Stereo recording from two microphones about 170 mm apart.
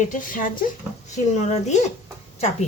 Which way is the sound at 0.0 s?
50° left (ahead or behind).